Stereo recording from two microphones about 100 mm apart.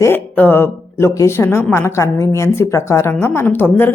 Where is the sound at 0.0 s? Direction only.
20° left (ahead or behind).